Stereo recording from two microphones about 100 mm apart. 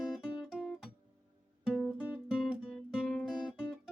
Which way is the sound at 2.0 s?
15° right (ahead or behind).